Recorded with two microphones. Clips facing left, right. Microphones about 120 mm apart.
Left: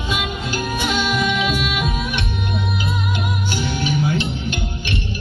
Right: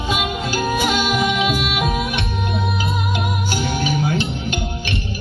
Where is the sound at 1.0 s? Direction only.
10° right (ahead or behind).